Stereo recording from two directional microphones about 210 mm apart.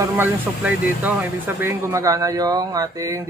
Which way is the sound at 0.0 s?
10° right (ahead or behind).